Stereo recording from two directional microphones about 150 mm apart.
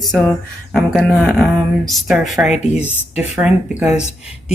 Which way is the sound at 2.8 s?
15° left (ahead or behind).